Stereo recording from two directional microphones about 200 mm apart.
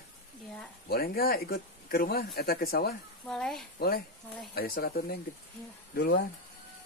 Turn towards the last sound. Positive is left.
turn(degrees=55)  # may be behind; listen again after turning